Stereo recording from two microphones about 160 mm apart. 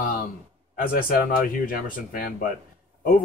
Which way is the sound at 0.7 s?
60° left (ahead or behind).